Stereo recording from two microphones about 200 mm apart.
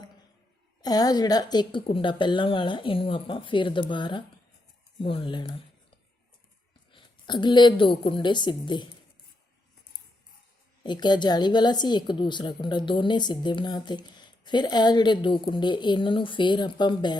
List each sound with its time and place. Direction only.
0.8 s a woman's voice: 20° left (ahead or behind)
10.8 s a woman's voice: 20° left (ahead or behind)